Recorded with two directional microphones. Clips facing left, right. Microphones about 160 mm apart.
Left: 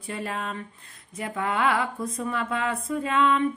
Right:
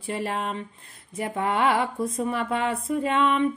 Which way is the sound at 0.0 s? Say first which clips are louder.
Right 3 dB; 25° right (ahead or behind).